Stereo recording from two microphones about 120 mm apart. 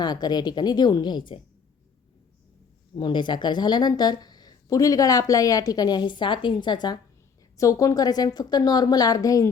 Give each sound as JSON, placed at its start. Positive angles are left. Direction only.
{"t": 0.0, "sound": "a woman's voice", "side_deg": 35}
{"t": 2.9, "sound": "a woman's voice", "side_deg": 40}